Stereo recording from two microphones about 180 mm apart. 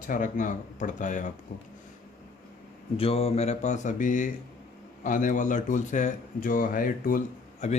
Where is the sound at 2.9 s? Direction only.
30° left (ahead or behind).